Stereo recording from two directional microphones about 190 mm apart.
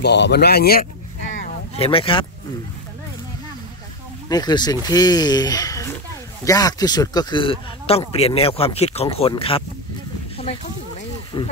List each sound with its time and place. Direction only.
0.0 s speech: 60° left (ahead or behind)
1.8 s speech: 30° left (ahead or behind)
4.3 s speech: 20° left (ahead or behind)